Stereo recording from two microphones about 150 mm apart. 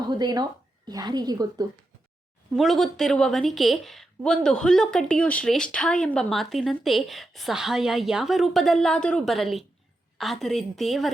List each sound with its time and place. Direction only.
0.1 s speech: 25° right (ahead or behind)
2.5 s a woman's voice: centre (ahead or behind)